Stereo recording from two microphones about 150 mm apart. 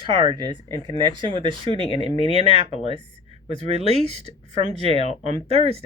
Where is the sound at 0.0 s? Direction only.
30° right (ahead or behind).